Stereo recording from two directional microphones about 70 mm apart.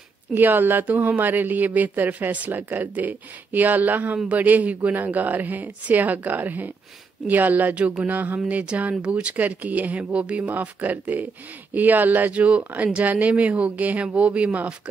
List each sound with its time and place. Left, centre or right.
0.3 s speech: right